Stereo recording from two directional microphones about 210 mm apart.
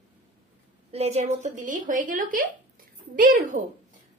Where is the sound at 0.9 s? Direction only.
30° right (ahead or behind).